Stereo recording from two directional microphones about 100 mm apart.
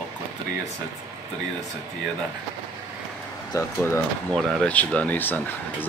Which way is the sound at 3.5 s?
25° left (ahead or behind).